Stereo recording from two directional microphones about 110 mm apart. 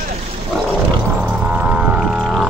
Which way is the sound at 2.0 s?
Centre (ahead or behind).